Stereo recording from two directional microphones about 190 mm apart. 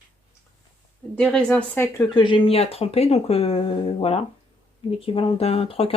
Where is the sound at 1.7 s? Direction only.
15° left (ahead or behind).